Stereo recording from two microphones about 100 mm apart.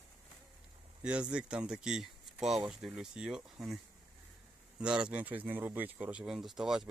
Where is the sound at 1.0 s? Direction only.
10° right (ahead or behind).